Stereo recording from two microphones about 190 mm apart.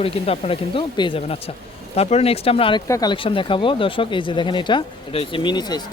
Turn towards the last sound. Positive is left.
turn(degrees=20)  # may be behind; listen again after turning